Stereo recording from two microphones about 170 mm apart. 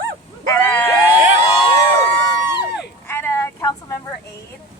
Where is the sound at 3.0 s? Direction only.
15° left (ahead or behind).